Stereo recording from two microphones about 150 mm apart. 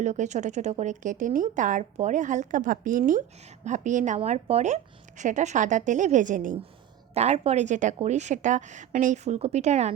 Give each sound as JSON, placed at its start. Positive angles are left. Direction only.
{"t": 0.0, "sound": "a woman's voice", "side_deg": -50}
{"t": 7.1, "sound": "speech", "side_deg": -45}